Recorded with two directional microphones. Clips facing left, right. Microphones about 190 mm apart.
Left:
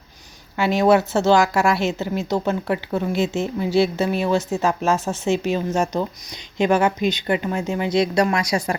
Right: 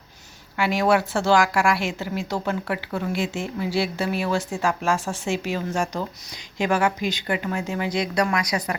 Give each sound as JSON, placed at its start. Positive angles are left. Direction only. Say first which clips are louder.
{"t": 0.5, "sound": "a woman's voice", "louder": "left 4 dB", "side_deg": 25}